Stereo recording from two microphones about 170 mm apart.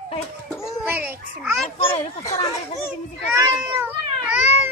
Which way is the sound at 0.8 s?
10° right (ahead or behind).